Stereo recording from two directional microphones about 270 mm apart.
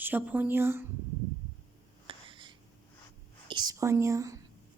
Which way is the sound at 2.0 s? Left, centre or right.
Centre.